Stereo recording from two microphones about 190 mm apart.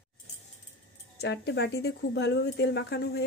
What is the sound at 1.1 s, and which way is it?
Speech, 60° left (ahead or behind).